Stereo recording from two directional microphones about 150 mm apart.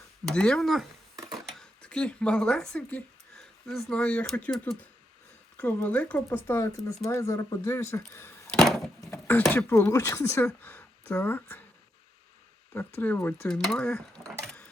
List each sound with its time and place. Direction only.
0.3 s speech: 5° left (ahead or behind)
1.1 s a sound: 25° right (ahead or behind)
1.5 s speech: 5° left (ahead or behind)
8.5 s door: centre (ahead or behind)
9.0 s speech: 10° left (ahead or behind)
13.0 s speech: 10° left (ahead or behind)
14.4 s sewing machine: 5° left (ahead or behind)